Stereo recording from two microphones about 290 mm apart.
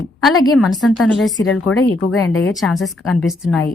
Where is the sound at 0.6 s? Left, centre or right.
Centre.